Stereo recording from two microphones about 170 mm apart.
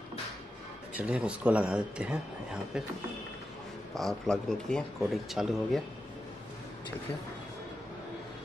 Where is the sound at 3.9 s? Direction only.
5° left (ahead or behind).